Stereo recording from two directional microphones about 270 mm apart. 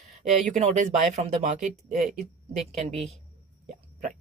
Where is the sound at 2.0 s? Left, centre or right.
Centre.